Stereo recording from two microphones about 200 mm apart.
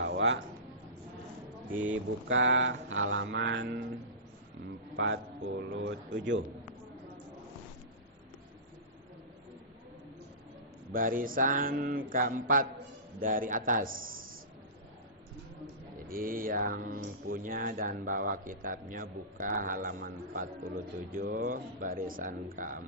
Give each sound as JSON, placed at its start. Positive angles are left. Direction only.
{"t": 0.0, "sound": "music", "side_deg": -65}
{"t": 1.9, "sound": "mantra", "side_deg": -70}
{"t": 4.9, "sound": "mantra", "side_deg": -70}
{"t": 10.9, "sound": "speech", "side_deg": -45}
{"t": 16.0, "sound": "speech", "side_deg": -45}